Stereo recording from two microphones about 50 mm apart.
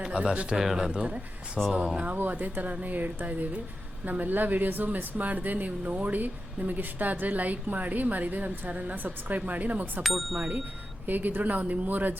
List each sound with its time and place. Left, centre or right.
0.0 s speech: centre
0.6 s speech: centre
0.9 s speech: right
2.1 s speech: right
10.0 s speech: centre
11.0 s speech: right